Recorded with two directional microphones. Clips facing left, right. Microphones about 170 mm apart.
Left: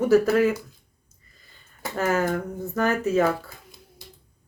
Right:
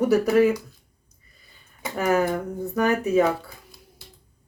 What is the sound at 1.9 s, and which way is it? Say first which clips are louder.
Speech: right 2 dB; 15° right (ahead or behind).